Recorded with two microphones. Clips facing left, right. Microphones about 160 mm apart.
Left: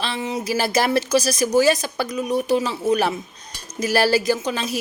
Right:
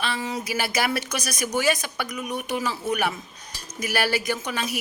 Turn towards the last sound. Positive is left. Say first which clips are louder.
# left 6 dB
turn(degrees=25)  # may be behind; listen again after turning